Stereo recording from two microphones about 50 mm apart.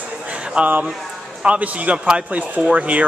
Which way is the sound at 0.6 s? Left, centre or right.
Right.